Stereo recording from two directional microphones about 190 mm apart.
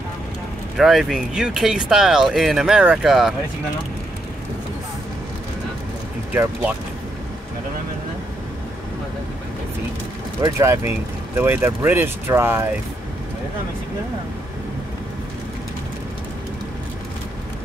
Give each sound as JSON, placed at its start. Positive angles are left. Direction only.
{"t": 0.7, "sound": "speech", "side_deg": 0}
{"t": 6.3, "sound": "speech", "side_deg": -10}
{"t": 10.4, "sound": "speech", "side_deg": -15}